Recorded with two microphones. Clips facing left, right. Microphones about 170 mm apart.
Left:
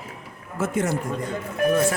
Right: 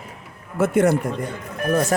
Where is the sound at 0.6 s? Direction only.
60° right (ahead or behind).